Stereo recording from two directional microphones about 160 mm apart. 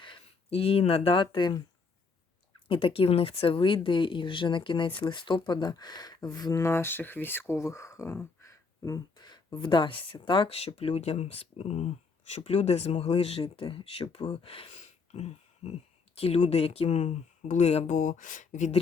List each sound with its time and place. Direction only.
0.0 s speech: 35° left (ahead or behind)
2.6 s speech: 35° left (ahead or behind)
15.1 s a sound: 40° left (ahead or behind)
16.1 s speech: 40° left (ahead or behind)